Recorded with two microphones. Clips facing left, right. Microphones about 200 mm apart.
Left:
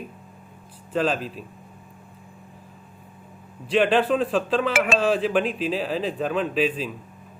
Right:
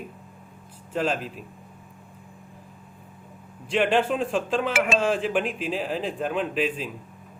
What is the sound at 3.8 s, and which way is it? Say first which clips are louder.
A man's voice: left 2 dB; 15° right (ahead or behind).